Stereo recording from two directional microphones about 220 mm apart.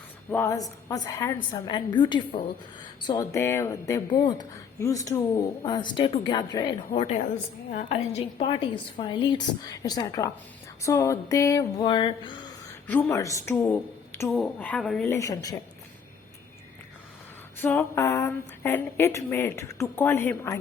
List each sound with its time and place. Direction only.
0.3 s a woman's voice: 10° left (ahead or behind)
12.9 s a woman's voice: 10° left (ahead or behind)
17.6 s a woman's voice: 10° left (ahead or behind)